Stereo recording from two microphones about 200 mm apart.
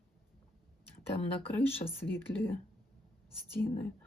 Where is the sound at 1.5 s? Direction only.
10° left (ahead or behind).